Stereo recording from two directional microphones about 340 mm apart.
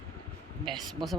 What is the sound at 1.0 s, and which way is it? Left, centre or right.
Speech, centre.